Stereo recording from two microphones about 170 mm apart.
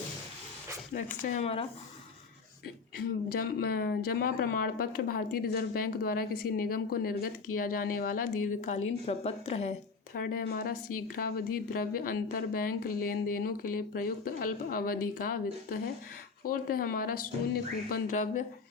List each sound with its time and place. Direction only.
1.2 s a woman's voice: 40° left (ahead or behind)
3.0 s speech: 60° left (ahead or behind)
8.6 s a woman's voice: 40° left (ahead or behind)
10.2 s speech: 60° left (ahead or behind)